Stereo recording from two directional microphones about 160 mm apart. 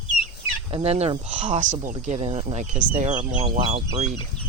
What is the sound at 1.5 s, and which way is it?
Speech, 50° right (ahead or behind).